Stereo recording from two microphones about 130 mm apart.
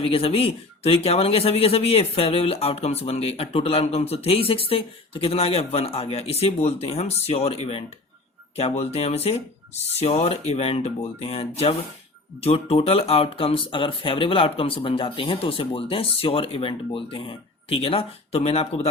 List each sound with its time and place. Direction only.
0.0 s speech: 45° left (ahead or behind)